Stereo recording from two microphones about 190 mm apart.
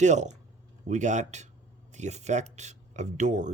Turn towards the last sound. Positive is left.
turn(degrees=-40)  # may be behind; listen again after turning